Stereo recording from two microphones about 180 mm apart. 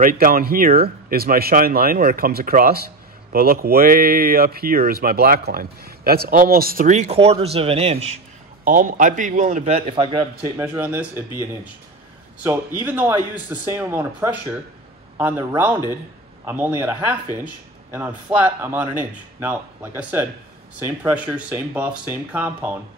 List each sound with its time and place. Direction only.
0.0 s speech: 50° right (ahead or behind); by 8.0 s 35° right (ahead or behind)
8.6 s speech: 50° right (ahead or behind); by 10.2 s 30° right (ahead or behind)
10.4 s speech: 15° right (ahead or behind)
12.8 s speech: 10° right (ahead or behind)